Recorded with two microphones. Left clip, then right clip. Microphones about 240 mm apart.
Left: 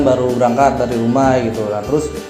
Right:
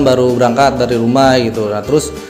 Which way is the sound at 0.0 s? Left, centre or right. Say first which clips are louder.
Right 3 dB; right.